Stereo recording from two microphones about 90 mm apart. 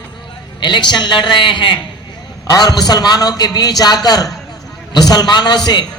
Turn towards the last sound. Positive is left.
turn(degrees=50)  # may be behind; listen again after turning